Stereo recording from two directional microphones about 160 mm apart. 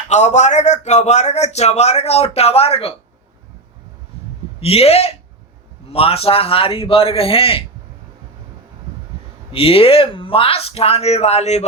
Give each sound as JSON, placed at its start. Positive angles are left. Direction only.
{"t": 0.1, "sound": "a man's voice", "side_deg": 45}
{"t": 4.6, "sound": "speech", "side_deg": 40}
{"t": 9.5, "sound": "speech", "side_deg": 35}